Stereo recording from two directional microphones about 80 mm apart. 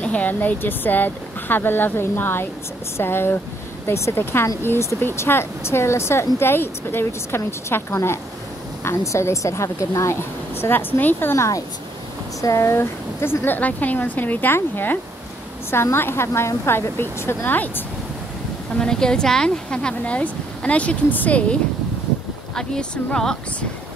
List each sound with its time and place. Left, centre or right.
0.0 s speech: centre
18.8 s speech: centre
22.6 s speech: centre